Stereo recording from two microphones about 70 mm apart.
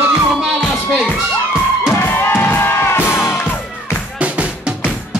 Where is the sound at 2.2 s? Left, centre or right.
Left.